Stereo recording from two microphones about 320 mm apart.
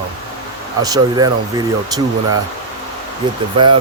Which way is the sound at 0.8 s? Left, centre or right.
Centre.